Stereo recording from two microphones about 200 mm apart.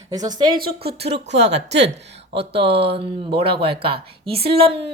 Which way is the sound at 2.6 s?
30° right (ahead or behind).